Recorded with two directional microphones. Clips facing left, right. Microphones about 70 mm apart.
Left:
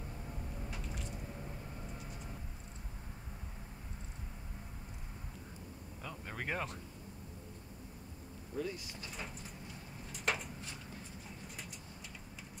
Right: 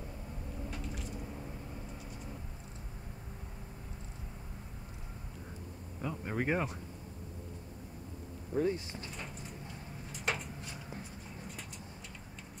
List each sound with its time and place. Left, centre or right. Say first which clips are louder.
0.7 s squish: right 3 dB; centre
5.9 s speech: right 9 dB; centre
8.5 s speech: right 8 dB; right
10.1 s a sound: even; centre